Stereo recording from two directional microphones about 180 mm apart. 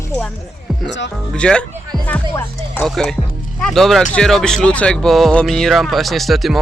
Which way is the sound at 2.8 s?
Centre (ahead or behind).